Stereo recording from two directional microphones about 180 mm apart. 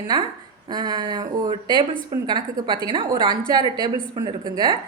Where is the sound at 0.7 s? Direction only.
25° right (ahead or behind).